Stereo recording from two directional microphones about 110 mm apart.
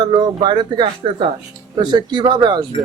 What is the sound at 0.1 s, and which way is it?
Speech, 45° right (ahead or behind).